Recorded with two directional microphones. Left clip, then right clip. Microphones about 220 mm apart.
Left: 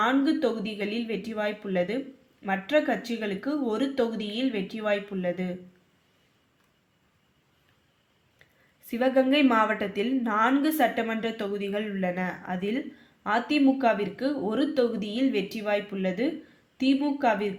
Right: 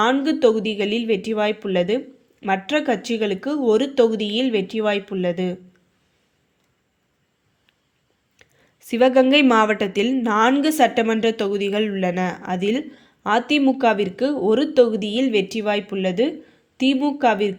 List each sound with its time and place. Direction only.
0.0 s a woman's voice: 40° right (ahead or behind)
8.4 s a sound: 40° right (ahead or behind)
8.9 s a woman's voice: 40° right (ahead or behind)